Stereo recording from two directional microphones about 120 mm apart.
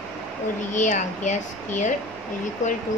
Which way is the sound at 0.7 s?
90° left.